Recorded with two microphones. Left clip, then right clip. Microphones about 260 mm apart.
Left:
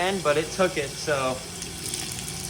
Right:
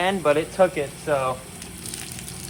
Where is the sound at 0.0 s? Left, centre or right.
Right.